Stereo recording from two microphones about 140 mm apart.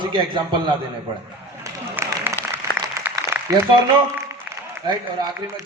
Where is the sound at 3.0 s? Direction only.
20° right (ahead or behind).